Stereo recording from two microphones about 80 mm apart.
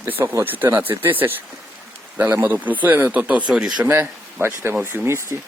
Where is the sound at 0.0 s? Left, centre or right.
Right.